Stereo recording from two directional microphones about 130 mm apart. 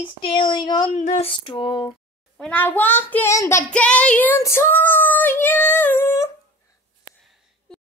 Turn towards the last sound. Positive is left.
turn(degrees=20)  # may be behind; listen again after turning